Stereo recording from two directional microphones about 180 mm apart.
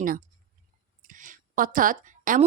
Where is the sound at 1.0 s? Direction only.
45° right (ahead or behind).